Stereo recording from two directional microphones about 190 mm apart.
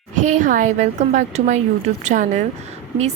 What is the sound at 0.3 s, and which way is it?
A woman's voice, 40° right (ahead or behind).